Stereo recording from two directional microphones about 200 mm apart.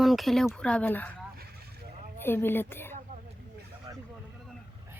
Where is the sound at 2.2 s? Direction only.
10° left (ahead or behind).